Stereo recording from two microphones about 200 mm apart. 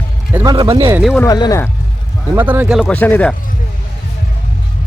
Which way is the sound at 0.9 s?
Centre (ahead or behind).